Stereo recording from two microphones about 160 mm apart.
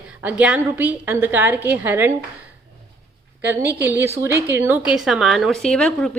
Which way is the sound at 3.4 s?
10° right (ahead or behind).